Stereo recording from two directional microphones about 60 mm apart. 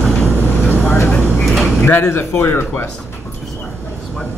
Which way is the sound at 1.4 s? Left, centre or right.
Centre.